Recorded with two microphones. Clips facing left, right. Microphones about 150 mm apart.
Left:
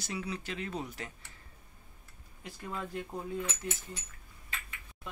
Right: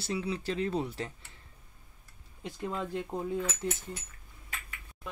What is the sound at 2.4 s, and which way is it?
Speech, 25° right (ahead or behind).